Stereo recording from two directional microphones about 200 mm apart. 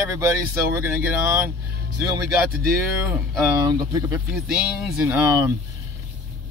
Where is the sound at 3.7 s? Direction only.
15° right (ahead or behind).